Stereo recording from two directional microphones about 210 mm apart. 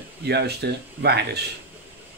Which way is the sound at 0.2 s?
50° right (ahead or behind).